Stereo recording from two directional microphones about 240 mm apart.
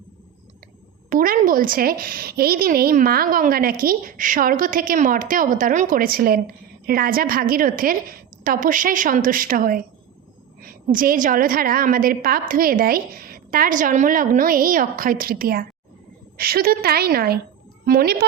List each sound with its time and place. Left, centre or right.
1.1 s a woman's voice: right